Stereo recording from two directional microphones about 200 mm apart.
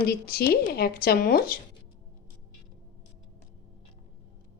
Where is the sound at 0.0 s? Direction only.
50° left (ahead or behind).